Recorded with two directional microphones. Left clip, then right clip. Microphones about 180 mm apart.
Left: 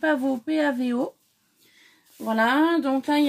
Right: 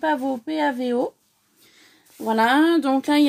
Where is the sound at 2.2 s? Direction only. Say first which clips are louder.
Right 3 dB; 60° right (ahead or behind).